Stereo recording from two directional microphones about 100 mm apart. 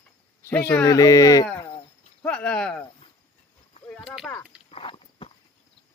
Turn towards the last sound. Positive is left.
turn(degrees=70)  # may be behind; listen again after turning